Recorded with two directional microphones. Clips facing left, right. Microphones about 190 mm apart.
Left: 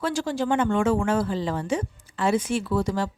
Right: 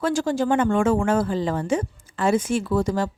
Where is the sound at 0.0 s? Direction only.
45° right (ahead or behind).